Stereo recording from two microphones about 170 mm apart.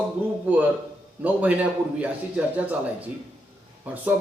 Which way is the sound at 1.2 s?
10° right (ahead or behind).